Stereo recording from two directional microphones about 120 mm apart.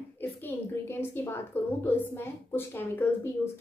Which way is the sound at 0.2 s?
15° left (ahead or behind).